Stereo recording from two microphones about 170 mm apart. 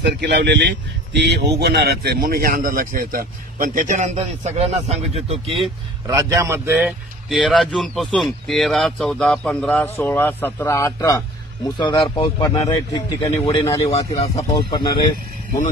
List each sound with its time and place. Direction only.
0.0 s speech: 90° right; by 5.7 s 35° right (ahead or behind)
6.0 s a man's voice: 20° right (ahead or behind); by 13.9 s 20° left (ahead or behind)
13.9 s speech: 40° left (ahead or behind)
14.7 s speech: 25° left (ahead or behind)